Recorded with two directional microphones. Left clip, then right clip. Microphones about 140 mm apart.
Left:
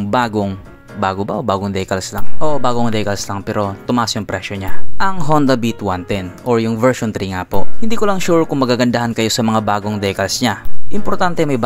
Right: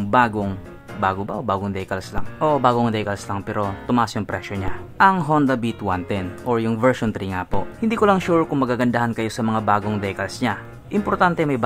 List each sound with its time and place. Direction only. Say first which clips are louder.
0.1 s speech: left 1 dB; 45° left (ahead or behind); by 8.5 s 30° left (ahead or behind)
8.5 s speech: left 5 dB; 45° left (ahead or behind)